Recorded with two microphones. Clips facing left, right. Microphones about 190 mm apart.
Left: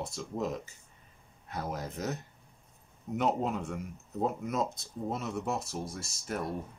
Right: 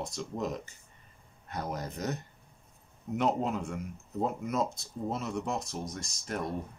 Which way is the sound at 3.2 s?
Centre (ahead or behind).